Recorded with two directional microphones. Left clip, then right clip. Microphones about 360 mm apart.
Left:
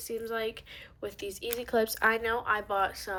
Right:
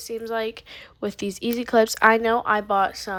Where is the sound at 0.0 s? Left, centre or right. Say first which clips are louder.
Right 6 dB; centre.